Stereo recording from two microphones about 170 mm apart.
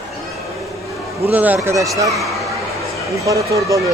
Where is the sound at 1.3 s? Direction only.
10° right (ahead or behind).